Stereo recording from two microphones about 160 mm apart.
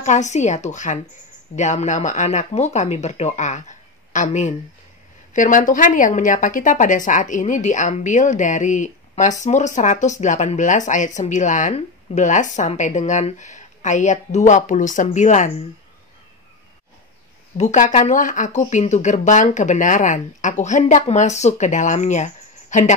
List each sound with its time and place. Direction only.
0.0 s speech: 50° left (ahead or behind)
17.6 s speech: 50° left (ahead or behind)